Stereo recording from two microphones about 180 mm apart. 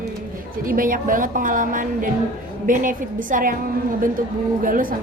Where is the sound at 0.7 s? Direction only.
50° right (ahead or behind).